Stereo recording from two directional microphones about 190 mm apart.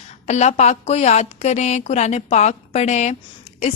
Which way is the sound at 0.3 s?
35° left (ahead or behind).